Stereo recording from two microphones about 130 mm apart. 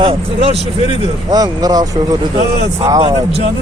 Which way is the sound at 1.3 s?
30° right (ahead or behind).